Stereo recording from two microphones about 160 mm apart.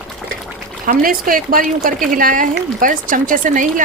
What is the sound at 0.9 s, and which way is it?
Speech, 65° right (ahead or behind).